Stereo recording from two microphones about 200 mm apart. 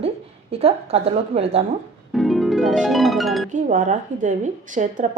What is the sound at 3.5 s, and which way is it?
Speech, 40° right (ahead or behind).